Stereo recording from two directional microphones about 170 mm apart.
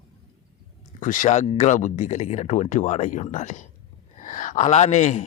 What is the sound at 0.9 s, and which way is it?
Speech, 50° left (ahead or behind).